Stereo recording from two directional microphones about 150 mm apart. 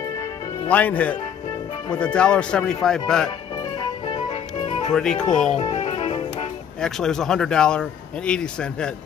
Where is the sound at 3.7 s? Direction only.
35° left (ahead or behind).